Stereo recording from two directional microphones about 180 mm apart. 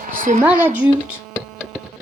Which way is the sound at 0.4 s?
10° right (ahead or behind).